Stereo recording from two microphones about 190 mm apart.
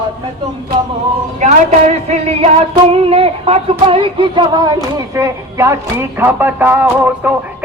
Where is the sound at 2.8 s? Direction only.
30° right (ahead or behind); by 7.3 s 5° right (ahead or behind).